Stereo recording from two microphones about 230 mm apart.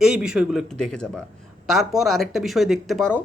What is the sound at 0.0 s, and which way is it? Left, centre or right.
Speech, centre.